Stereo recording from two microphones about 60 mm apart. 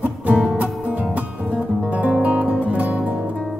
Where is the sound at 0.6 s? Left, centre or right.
Right.